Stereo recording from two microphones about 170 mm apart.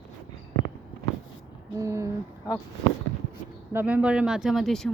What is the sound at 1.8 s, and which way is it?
Speech, 15° right (ahead or behind).